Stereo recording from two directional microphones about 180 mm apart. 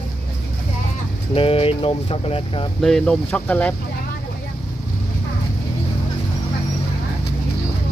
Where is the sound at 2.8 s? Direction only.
5° left (ahead or behind).